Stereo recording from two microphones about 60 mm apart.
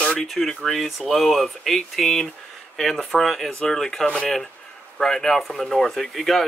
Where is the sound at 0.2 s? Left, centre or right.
Centre.